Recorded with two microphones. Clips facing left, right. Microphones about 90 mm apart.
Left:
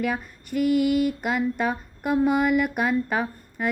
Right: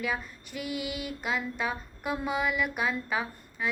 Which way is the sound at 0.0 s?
50° left (ahead or behind).